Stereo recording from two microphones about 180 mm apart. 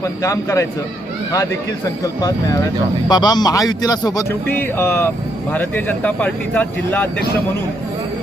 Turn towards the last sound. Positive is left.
turn(degrees=10)  # may be behind; listen again after turning